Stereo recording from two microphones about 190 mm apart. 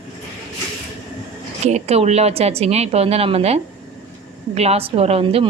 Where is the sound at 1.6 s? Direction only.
35° right (ahead or behind).